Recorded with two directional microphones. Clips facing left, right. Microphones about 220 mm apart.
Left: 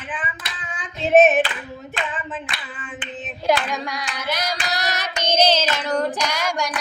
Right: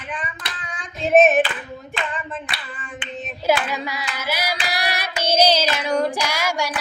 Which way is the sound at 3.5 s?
5° right (ahead or behind).